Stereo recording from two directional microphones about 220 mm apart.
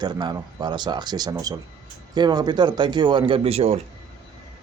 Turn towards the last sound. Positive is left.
turn(degrees=-30)  # may be behind; listen again after turning